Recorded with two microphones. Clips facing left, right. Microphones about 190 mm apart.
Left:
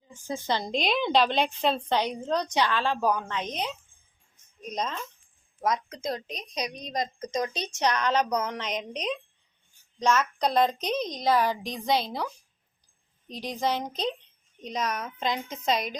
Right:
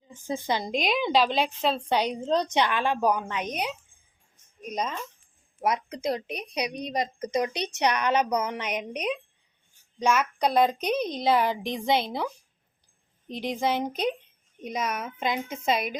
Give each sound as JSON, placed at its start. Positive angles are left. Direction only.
{"t": 0.1, "sound": "a woman's voice", "side_deg": -20}
{"t": 0.6, "sound": "a woman's voice", "side_deg": -5}
{"t": 2.0, "sound": "a woman's voice", "side_deg": -15}
{"t": 4.7, "sound": "a woman's voice", "side_deg": -10}
{"t": 11.2, "sound": "a woman's voice", "side_deg": -20}
{"t": 13.6, "sound": "a woman's voice", "side_deg": -10}